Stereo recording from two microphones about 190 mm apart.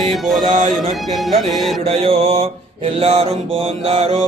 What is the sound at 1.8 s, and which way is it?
Mantra, 30° right (ahead or behind).